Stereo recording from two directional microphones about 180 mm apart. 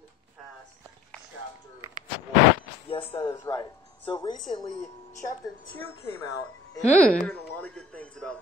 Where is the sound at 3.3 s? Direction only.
20° left (ahead or behind).